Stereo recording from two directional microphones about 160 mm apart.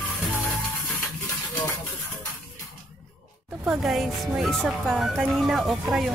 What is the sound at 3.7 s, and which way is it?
Speech, 5° right (ahead or behind).